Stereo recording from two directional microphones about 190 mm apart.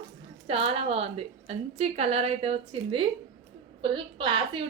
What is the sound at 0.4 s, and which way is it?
A woman's voice, 30° right (ahead or behind).